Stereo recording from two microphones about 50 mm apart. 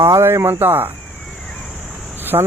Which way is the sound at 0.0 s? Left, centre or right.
Right.